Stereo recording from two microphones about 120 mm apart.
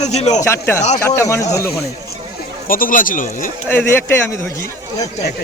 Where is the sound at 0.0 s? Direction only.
70° left (ahead or behind).